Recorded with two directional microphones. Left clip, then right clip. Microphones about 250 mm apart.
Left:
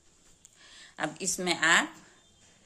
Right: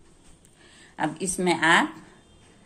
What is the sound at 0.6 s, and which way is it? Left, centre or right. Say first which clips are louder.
Speech: right 6 dB; left.